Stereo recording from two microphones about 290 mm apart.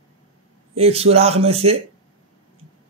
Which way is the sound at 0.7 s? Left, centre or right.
Right.